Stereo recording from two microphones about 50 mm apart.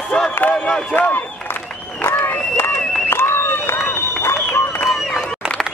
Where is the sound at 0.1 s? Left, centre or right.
Centre.